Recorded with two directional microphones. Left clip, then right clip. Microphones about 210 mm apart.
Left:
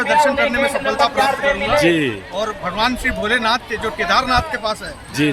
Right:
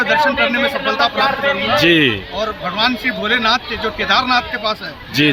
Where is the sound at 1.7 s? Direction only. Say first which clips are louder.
Right 6 dB; 10° right (ahead or behind).